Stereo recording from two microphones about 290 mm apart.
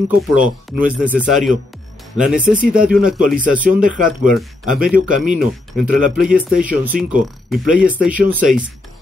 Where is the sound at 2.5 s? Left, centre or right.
Centre.